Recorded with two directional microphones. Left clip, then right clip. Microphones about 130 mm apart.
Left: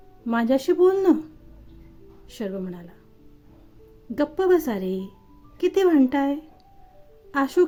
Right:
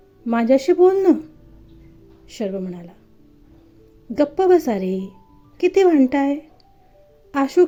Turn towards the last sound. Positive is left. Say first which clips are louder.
# right 4 dB
turn(degrees=-15)  # may be behind; listen again after turning